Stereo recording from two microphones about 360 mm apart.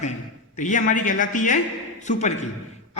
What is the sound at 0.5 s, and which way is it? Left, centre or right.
A man's voice, left.